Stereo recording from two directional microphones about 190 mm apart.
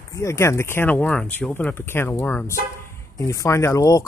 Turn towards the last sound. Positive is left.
turn(degrees=15)  # may be behind; listen again after turning